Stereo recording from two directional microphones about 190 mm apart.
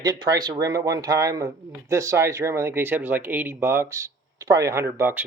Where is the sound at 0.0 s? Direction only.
20° right (ahead or behind).